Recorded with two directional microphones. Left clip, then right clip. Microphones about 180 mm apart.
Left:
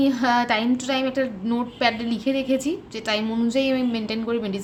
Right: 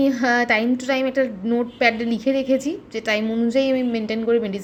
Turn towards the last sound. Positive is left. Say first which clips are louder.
# right 5 dB
turn(degrees=-5)  # may be behind; listen again after turning